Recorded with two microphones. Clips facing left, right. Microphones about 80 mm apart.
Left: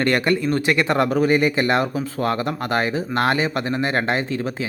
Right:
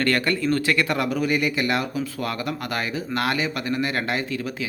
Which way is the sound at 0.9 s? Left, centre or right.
Left.